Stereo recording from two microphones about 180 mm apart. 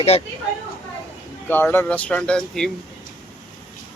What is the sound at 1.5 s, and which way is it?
Speech, 10° left (ahead or behind).